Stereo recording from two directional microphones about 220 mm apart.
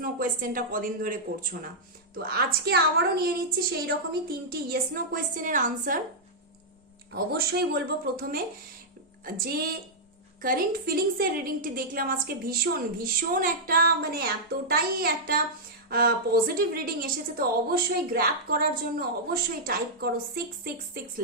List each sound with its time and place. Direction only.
0.0 s a woman's voice: 40° right (ahead or behind)
7.1 s a woman's voice: 45° right (ahead or behind)